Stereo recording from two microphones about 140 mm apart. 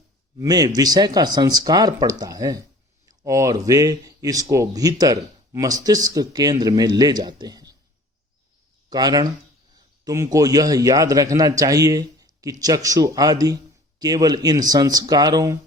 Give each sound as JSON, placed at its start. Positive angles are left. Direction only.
{"t": 0.3, "sound": "speech", "side_deg": -30}
{"t": 8.9, "sound": "a man's voice", "side_deg": -30}